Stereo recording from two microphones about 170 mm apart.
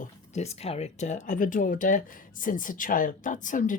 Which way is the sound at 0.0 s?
40° left (ahead or behind).